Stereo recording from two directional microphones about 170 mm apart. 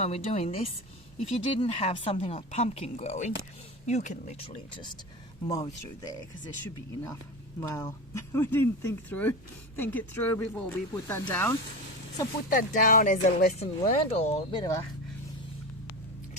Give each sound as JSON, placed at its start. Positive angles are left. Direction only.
{"t": 0.0, "sound": "a woman's voice", "side_deg": 40}
{"t": 5.5, "sound": "speech", "side_deg": 20}
{"t": 7.6, "sound": "speech", "side_deg": 15}
{"t": 12.5, "sound": "speech", "side_deg": 55}